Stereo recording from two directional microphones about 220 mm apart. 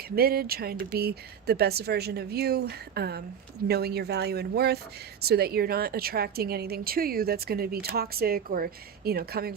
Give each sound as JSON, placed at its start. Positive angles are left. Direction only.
{"t": 0.2, "sound": "speech", "side_deg": -45}